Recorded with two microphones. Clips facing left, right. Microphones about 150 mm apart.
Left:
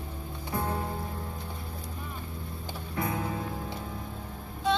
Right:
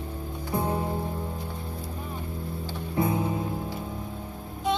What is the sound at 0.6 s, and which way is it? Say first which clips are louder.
Music: right 4 dB; 20° right (ahead or behind).